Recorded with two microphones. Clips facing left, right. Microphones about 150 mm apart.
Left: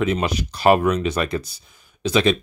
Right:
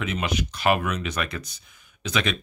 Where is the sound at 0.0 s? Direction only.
35° left (ahead or behind).